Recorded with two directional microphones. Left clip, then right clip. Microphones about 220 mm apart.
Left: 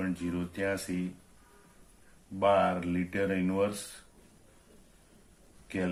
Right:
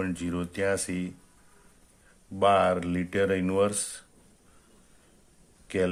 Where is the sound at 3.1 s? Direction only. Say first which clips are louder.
Right 6 dB; 50° right (ahead or behind).